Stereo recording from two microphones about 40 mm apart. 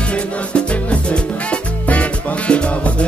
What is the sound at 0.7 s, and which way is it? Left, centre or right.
Music, left.